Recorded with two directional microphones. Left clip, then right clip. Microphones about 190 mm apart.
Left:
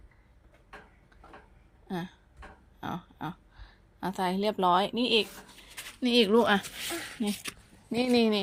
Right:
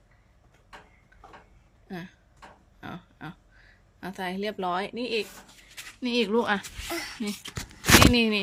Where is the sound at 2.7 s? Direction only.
20° left (ahead or behind).